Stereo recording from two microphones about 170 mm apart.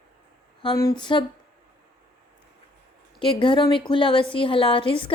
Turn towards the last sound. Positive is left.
turn(degrees=30)  # may be behind; listen again after turning